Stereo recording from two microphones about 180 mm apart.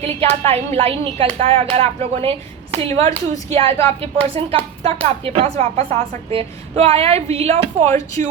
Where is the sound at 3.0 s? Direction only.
20° left (ahead or behind).